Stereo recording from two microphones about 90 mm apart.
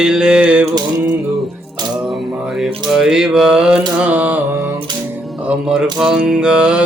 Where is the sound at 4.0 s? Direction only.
15° right (ahead or behind).